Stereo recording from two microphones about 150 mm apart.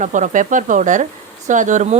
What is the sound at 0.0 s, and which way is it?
Speech, 55° right (ahead or behind).